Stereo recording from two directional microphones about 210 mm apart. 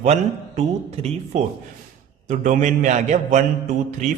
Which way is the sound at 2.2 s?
35° right (ahead or behind).